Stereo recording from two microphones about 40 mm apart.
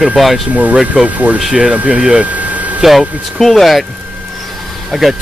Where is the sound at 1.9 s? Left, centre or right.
Right.